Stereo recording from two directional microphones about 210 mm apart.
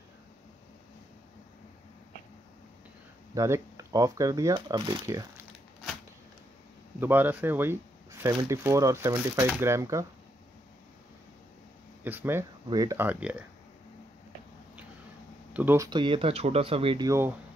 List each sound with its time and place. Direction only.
3.3 s speech: 15° right (ahead or behind)
7.0 s speech: 10° right (ahead or behind)
12.0 s speech: 10° right (ahead or behind)
15.5 s speech: 10° right (ahead or behind)